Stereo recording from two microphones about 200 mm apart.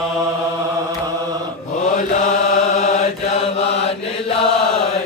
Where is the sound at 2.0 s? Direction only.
40° left (ahead or behind).